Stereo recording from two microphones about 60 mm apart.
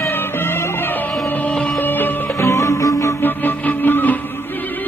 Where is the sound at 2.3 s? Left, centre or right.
Left.